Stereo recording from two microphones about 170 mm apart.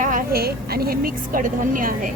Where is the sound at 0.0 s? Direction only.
55° right (ahead or behind).